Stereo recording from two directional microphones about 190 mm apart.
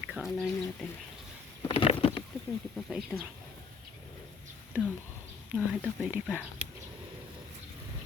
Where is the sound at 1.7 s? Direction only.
30° left (ahead or behind).